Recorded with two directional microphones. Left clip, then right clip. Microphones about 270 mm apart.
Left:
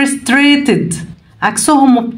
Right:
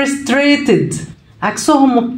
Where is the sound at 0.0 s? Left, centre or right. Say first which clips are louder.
Left 2 dB; left.